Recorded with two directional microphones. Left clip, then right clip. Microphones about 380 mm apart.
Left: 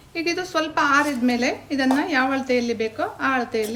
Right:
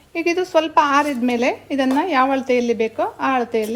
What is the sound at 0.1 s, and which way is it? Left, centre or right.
A woman's voice, centre.